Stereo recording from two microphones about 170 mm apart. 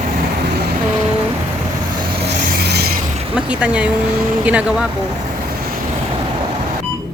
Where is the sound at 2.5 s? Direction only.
70° right (ahead or behind).